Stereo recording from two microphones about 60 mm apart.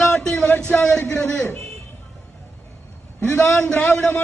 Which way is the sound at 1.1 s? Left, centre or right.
Left.